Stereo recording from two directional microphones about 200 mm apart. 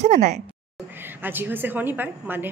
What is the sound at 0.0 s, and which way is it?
Speech, 35° right (ahead or behind).